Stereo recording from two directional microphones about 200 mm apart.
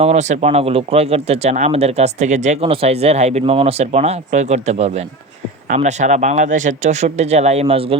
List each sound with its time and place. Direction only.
0.0 s speech: 35° right (ahead or behind)